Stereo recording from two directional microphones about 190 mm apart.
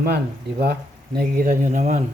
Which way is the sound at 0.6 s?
55° right (ahead or behind).